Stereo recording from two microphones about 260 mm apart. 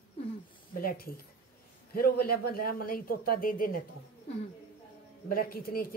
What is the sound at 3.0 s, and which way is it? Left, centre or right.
Speech, left.